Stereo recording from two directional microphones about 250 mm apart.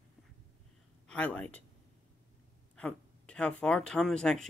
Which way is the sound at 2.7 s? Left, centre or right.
Centre.